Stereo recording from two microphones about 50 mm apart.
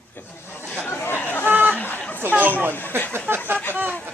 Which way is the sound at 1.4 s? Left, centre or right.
Right.